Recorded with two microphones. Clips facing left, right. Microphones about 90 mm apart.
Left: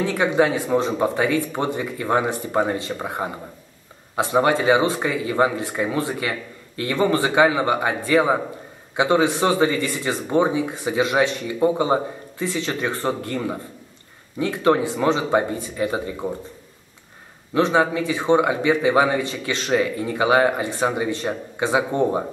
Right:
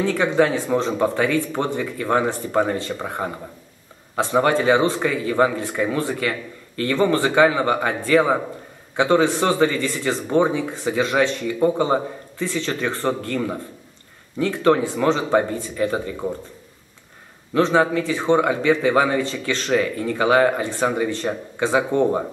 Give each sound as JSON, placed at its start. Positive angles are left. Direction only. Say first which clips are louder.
{"t": 0.1, "sound": "speech", "louder": "even", "side_deg": 20}
{"t": 17.6, "sound": "speech", "louder": "right 1 dB", "side_deg": 15}